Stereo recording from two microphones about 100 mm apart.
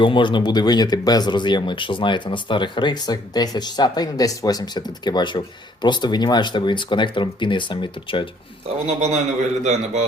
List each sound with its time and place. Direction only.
0.0 s speech: 55° left (ahead or behind)
8.6 s a man's voice: 90° right